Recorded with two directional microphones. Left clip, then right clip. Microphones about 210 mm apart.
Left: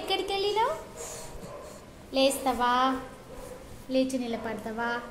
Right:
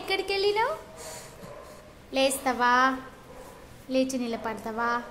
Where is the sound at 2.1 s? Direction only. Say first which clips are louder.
Even; 35° right (ahead or behind).